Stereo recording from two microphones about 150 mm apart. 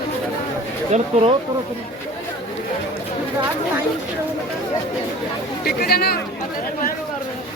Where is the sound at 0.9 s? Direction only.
45° right (ahead or behind).